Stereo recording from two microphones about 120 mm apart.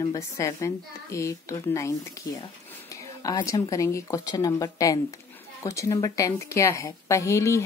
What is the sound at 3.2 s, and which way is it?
A woman's voice, 30° left (ahead or behind).